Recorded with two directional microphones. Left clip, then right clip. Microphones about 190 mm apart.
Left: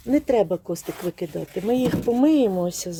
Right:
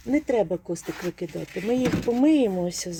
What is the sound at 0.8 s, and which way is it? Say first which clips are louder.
Speech: left 2 dB; 45° left (ahead or behind).